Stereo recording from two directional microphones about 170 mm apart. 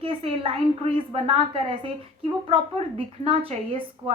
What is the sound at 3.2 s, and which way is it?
Speech, 35° right (ahead or behind).